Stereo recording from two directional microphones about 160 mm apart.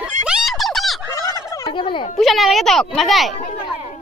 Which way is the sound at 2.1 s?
Centre (ahead or behind).